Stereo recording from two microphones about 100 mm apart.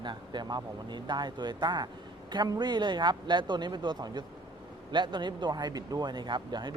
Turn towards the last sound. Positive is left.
turn(degrees=-50)  # may be behind; listen again after turning